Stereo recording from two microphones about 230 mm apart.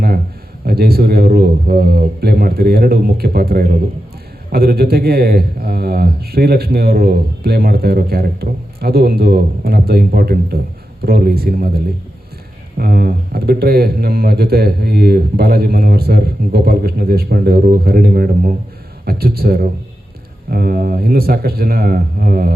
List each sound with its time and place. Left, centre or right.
0.6 s a man's voice: right
12.7 s a man's voice: right